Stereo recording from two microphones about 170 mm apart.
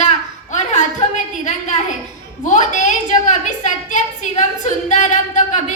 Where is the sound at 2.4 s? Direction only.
45° left (ahead or behind).